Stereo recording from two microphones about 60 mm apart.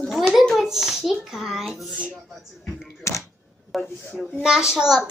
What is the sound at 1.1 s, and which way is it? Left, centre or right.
Speech, centre.